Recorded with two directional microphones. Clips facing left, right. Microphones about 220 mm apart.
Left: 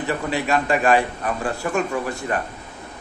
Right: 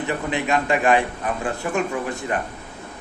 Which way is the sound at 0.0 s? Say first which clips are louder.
Left 1 dB; 20° right (ahead or behind).